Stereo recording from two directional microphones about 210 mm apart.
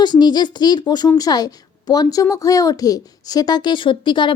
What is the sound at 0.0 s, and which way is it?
A woman's voice, 20° left (ahead or behind).